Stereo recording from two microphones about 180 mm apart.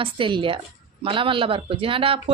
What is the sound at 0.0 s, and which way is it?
A woman's voice, 30° right (ahead or behind).